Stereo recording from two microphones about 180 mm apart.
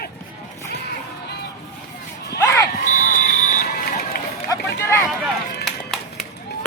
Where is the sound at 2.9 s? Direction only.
45° left (ahead or behind).